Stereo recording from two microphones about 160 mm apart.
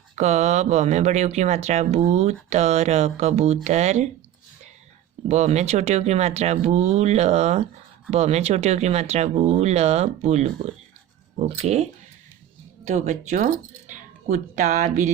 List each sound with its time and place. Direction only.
0.2 s speech: 45° right (ahead or behind)
5.3 s speech: 45° right (ahead or behind)